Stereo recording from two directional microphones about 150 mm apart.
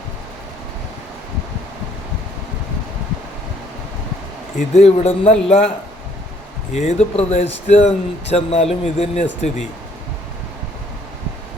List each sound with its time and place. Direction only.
4.5 s speech: 50° left (ahead or behind)
6.7 s speech: 50° left (ahead or behind)